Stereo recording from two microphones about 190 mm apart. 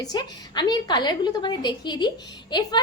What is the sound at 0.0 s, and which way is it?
A woman's voice, 20° left (ahead or behind).